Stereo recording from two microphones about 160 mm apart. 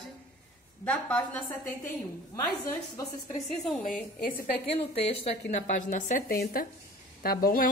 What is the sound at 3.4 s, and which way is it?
Speech, 5° left (ahead or behind).